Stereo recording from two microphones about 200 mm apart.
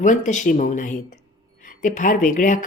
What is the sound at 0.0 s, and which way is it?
A woman's voice, 40° left (ahead or behind).